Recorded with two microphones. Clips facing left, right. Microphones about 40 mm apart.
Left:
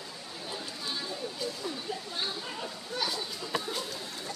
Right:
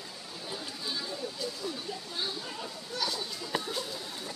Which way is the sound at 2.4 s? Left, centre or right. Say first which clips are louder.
Left 2 dB; centre.